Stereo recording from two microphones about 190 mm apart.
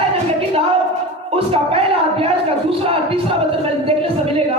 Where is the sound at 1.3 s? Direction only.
30° right (ahead or behind).